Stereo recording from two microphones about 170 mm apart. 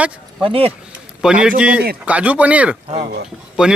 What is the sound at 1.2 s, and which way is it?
Speech, 5° right (ahead or behind).